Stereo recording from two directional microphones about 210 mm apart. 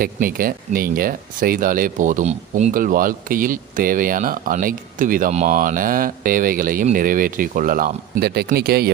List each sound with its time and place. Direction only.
0.0 s speech: 45° right (ahead or behind)